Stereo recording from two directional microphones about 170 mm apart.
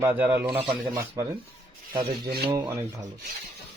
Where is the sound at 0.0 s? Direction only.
15° right (ahead or behind).